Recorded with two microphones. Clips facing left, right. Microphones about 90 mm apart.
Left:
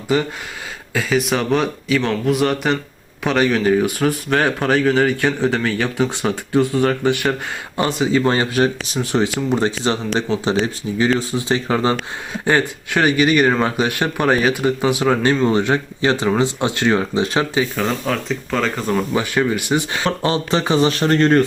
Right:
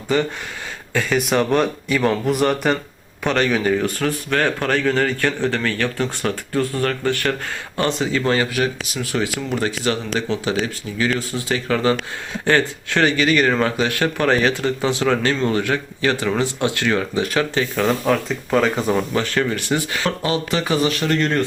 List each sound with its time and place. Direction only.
0.1 s speech: 10° left (ahead or behind)
17.7 s speech: centre (ahead or behind)
19.1 s speech: 15° left (ahead or behind)
20.1 s speech: 30° left (ahead or behind)